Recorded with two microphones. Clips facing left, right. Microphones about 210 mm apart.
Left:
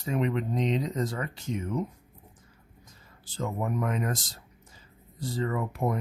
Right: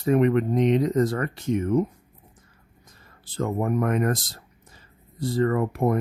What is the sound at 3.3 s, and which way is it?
Speech, 55° right (ahead or behind).